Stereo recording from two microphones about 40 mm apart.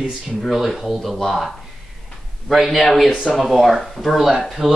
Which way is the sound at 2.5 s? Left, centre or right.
Centre.